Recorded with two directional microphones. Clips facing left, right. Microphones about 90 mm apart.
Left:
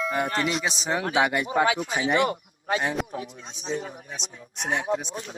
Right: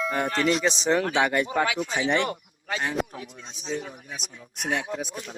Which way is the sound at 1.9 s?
10° left (ahead or behind).